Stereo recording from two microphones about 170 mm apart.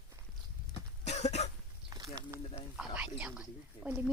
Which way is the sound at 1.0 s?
40° left (ahead or behind).